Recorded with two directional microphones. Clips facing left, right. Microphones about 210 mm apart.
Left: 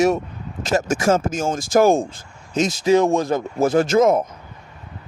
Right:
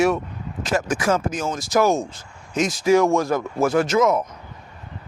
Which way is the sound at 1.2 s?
45° left (ahead or behind).